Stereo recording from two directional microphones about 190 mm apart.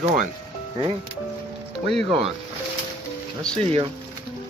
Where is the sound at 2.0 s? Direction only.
30° right (ahead or behind).